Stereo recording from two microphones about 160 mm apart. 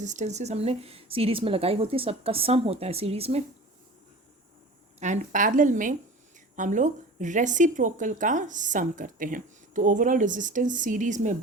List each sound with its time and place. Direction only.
0.0 s speech: 50° right (ahead or behind)
4.9 s a woman's voice: 50° right (ahead or behind)